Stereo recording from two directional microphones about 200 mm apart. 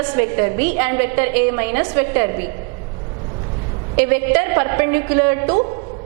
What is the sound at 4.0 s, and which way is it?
A woman's voice, 15° right (ahead or behind).